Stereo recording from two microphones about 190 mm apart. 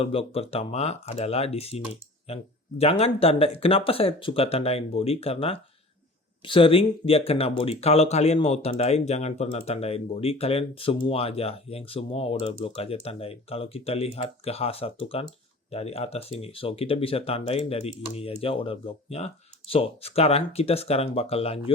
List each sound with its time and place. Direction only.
0.0 s speech: 30° left (ahead or behind)